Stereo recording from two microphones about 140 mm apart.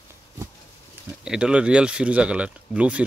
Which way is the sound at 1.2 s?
5° right (ahead or behind).